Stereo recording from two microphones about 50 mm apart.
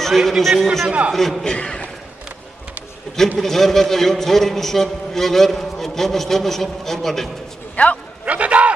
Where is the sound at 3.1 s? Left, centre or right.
Centre.